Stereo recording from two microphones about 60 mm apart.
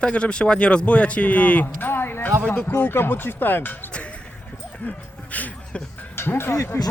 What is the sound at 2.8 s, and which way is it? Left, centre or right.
Speech, left.